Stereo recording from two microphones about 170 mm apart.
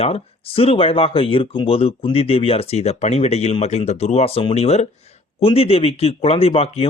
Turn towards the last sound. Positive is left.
turn(degrees=35)  # may be behind; listen again after turning